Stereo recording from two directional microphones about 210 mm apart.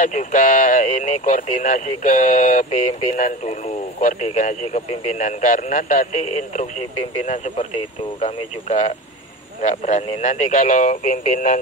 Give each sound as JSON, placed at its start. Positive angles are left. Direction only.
{"t": 0.0, "sound": "speech", "side_deg": 35}